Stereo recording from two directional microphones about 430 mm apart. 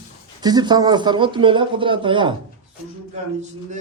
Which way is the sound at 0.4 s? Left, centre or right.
Centre.